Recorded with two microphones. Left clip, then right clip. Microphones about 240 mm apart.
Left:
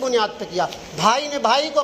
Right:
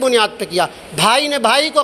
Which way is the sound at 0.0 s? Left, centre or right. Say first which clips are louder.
Right 6 dB; right.